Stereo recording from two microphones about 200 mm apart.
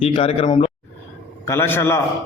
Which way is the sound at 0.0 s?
30° left (ahead or behind).